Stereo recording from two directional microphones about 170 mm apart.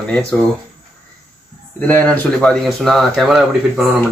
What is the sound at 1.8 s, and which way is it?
Speech, 10° left (ahead or behind).